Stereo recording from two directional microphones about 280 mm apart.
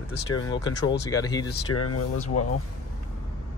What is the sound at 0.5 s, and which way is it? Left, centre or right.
Speech, centre.